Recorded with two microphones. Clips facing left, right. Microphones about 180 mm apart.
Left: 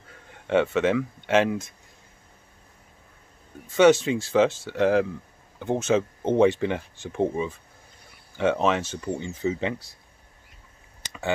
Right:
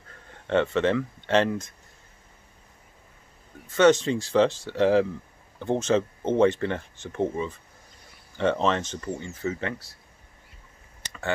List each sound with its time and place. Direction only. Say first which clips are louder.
0.5 s speech: left 1 dB; 10° left (ahead or behind)
3.6 s speech: left 1 dB; 10° left (ahead or behind)
11.0 s a sound: left 2 dB; 15° left (ahead or behind)